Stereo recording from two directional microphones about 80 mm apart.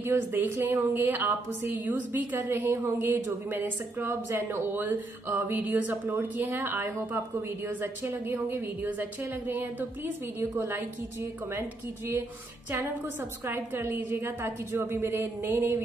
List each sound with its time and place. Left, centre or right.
0.0 s a woman's voice: right
13.5 s speech: right